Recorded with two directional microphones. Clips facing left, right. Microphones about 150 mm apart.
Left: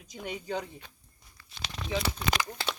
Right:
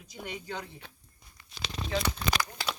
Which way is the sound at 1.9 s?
20° left (ahead or behind).